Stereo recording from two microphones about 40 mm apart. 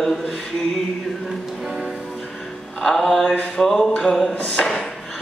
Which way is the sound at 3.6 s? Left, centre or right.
Centre.